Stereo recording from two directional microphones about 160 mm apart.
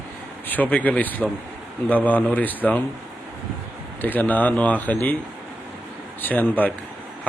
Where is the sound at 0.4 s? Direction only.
10° left (ahead or behind).